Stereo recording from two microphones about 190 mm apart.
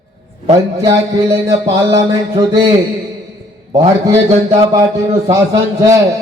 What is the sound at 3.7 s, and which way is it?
Speech, 20° right (ahead or behind).